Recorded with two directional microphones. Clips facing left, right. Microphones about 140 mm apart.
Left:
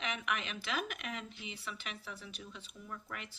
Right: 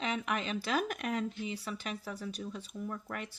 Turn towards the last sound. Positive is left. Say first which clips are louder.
# right 7 dB
turn(degrees=-45)  # may be behind; listen again after turning